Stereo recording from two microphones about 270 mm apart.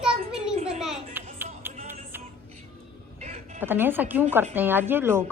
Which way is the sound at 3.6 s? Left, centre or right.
Centre.